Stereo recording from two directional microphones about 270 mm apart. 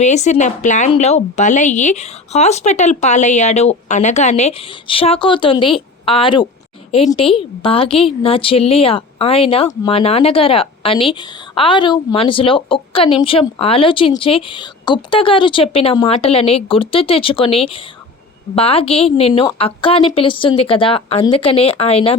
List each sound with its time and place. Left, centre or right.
0.0 s a woman's voice: left